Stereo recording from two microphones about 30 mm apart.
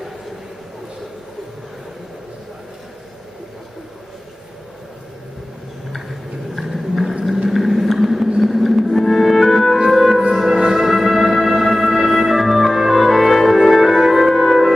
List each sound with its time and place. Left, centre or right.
5.9 s a sound: centre
7.4 s vehicle: centre
8.4 s music: centre